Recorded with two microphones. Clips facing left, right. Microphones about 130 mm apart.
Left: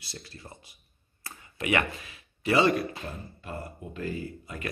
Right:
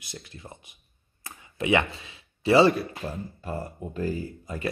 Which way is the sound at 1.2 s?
20° right (ahead or behind).